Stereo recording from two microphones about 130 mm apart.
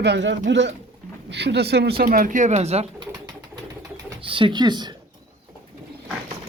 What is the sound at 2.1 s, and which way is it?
Speech, 85° right.